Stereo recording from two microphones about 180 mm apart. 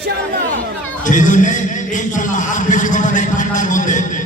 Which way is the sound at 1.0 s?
45° left (ahead or behind).